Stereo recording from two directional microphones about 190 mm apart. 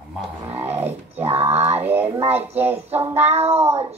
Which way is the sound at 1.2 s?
35° right (ahead or behind).